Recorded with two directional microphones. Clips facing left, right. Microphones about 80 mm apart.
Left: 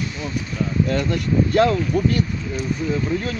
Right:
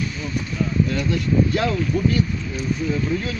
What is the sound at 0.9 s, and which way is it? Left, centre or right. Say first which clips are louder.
Speech: left 1 dB; left.